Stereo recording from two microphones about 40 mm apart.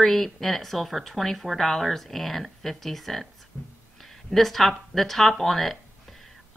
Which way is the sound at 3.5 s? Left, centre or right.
Centre.